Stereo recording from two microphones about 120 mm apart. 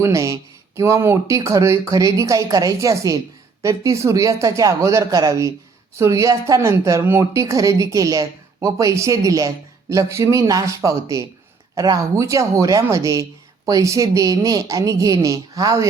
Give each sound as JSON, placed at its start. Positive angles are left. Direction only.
{"t": 0.0, "sound": "a woman's voice", "side_deg": -25}